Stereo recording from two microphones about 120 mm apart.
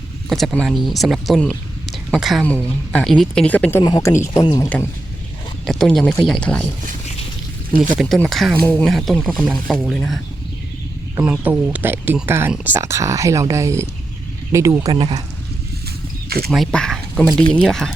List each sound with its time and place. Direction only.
0.3 s a woman's voice: centre (ahead or behind)
3.8 s speech: 35° left (ahead or behind)
4.1 s speech: 25° left (ahead or behind)
4.4 s speech: 35° left (ahead or behind)
5.6 s a woman's voice: 5° left (ahead or behind)
7.9 s a woman's voice: centre (ahead or behind)
11.2 s speech: 15° right (ahead or behind)
14.9 s speech: 45° right (ahead or behind)
16.5 s speech: centre (ahead or behind)